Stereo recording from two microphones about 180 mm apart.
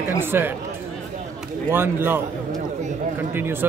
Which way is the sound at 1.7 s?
10° right (ahead or behind).